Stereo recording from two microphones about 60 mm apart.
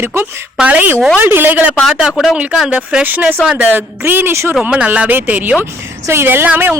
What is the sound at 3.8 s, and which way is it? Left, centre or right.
Speech, right.